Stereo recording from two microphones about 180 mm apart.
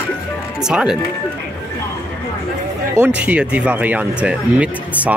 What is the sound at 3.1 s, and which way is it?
Speech, 5° right (ahead or behind).